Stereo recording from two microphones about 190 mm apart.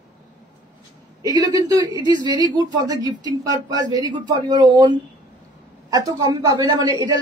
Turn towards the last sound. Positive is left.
turn(degrees=-20)  # may be behind; listen again after turning